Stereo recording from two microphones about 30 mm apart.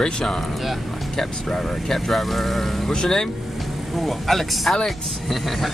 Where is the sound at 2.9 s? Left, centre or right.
Left.